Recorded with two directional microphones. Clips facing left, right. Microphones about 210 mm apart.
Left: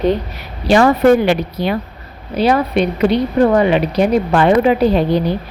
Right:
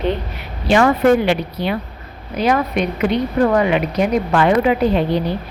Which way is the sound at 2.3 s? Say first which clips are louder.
Left 3 dB; 30° left (ahead or behind).